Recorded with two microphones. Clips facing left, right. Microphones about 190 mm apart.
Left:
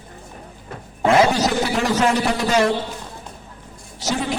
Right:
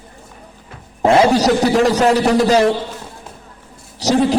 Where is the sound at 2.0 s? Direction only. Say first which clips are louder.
Right 6 dB; 40° right (ahead or behind).